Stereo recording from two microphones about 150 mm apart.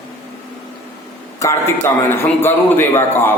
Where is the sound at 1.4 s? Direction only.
20° left (ahead or behind).